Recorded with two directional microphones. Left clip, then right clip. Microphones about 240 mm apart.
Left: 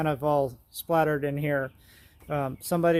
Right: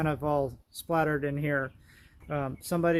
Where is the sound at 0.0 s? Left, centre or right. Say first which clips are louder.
Left 4 dB; centre.